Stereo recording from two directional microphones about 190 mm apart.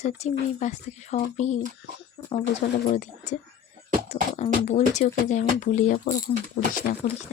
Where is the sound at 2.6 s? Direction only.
45° left (ahead or behind).